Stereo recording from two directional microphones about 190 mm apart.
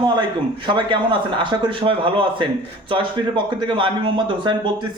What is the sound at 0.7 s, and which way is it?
Speech, 25° right (ahead or behind).